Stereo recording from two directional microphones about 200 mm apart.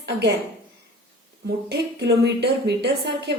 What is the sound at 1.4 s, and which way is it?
A woman's voice, 55° right (ahead or behind).